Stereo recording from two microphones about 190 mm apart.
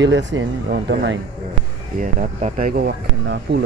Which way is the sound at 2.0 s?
40° right (ahead or behind).